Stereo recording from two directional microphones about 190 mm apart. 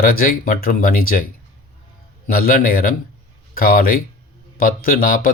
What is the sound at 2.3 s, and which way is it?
Speech, 50° left (ahead or behind).